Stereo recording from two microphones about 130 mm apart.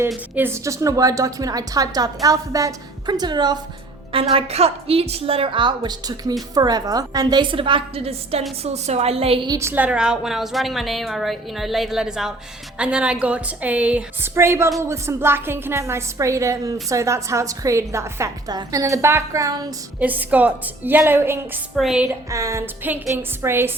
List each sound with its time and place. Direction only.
0.3 s a woman's voice: 20° right (ahead or behind)
4.1 s a woman's voice: 45° right (ahead or behind)
9.5 s a woman's voice: 20° right (ahead or behind)
20.0 s a woman's voice: 10° right (ahead or behind)
21.8 s a woman's voice: 5° right (ahead or behind)
22.3 s a woman's voice: 25° right (ahead or behind)